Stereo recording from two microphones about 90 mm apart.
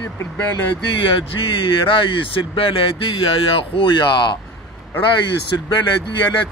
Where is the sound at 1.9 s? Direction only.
70° left (ahead or behind).